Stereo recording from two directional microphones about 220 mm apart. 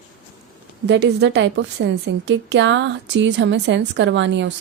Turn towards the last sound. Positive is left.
turn(degrees=-55)  # may be behind; listen again after turning